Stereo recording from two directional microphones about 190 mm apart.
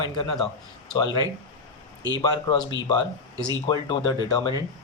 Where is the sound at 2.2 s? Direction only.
25° left (ahead or behind).